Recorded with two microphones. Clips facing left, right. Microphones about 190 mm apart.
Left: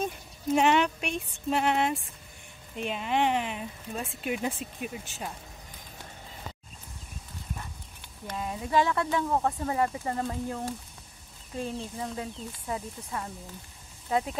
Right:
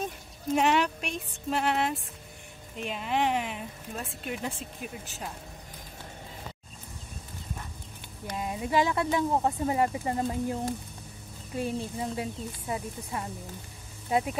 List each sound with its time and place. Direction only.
0.6 s speech: centre (ahead or behind)
8.3 s speech: 15° right (ahead or behind)